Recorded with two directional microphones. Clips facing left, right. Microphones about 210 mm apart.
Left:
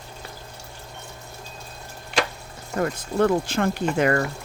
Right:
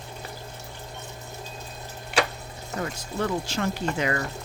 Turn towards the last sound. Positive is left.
turn(degrees=55)  # may be behind; listen again after turning